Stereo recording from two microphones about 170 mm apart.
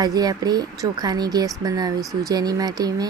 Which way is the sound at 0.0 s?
20° right (ahead or behind).